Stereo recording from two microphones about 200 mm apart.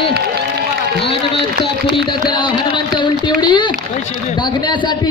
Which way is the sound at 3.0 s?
25° left (ahead or behind).